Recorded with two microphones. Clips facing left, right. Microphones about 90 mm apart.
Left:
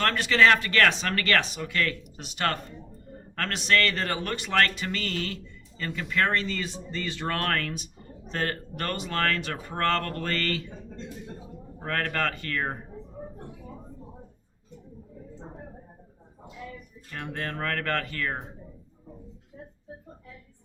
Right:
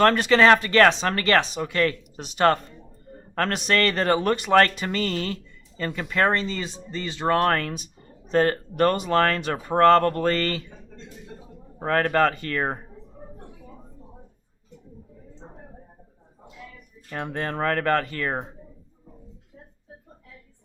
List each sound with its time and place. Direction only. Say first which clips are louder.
0.0 s speech: right 5 dB; 35° right (ahead or behind)
11.9 s speech: right 8 dB; 30° right (ahead or behind)
17.1 s speech: right 5 dB; 40° right (ahead or behind)
17.3 s speech: right 6 dB; 30° right (ahead or behind)